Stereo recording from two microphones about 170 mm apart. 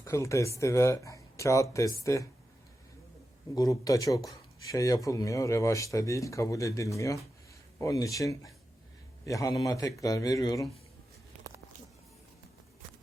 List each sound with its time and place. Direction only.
0.0 s speech: 15° left (ahead or behind)
3.5 s speech: 20° left (ahead or behind)